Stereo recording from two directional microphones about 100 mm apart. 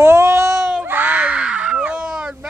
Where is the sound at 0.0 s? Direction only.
25° right (ahead or behind).